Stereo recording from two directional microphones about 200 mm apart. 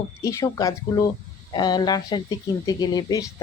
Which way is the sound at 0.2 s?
15° left (ahead or behind).